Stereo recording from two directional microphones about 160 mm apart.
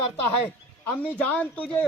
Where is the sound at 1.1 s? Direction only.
10° left (ahead or behind).